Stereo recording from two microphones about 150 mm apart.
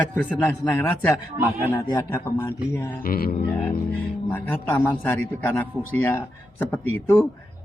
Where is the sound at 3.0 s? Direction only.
80° left.